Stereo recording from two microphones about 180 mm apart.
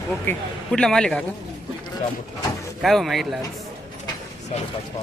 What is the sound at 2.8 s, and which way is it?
Speech, centre (ahead or behind).